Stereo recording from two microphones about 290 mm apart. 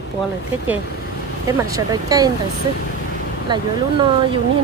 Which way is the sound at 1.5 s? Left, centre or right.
Centre.